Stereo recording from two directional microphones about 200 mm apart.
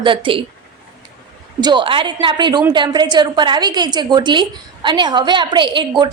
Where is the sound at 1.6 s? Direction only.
20° right (ahead or behind).